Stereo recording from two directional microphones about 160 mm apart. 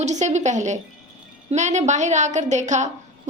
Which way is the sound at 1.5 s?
45° right (ahead or behind).